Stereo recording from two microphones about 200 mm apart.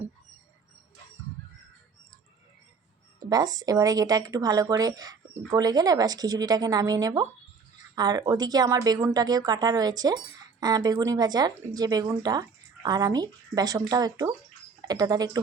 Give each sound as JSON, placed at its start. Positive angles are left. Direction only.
{"t": 3.2, "sound": "a woman's voice", "side_deg": -20}